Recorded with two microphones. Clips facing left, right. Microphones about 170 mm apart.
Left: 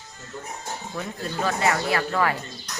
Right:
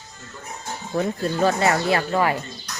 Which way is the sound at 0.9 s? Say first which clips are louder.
Right 9 dB; 40° right (ahead or behind).